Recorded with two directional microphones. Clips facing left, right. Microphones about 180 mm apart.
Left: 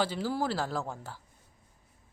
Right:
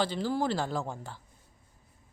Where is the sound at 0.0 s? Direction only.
10° left (ahead or behind).